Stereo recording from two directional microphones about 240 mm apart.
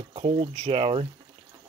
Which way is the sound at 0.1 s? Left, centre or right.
Right.